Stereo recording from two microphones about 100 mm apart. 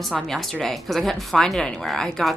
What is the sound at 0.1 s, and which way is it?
A woman's voice, 5° left (ahead or behind).